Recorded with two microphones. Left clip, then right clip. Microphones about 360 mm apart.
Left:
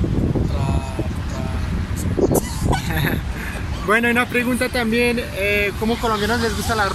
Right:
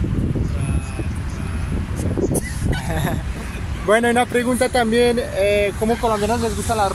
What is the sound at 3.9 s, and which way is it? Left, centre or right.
Speech, centre.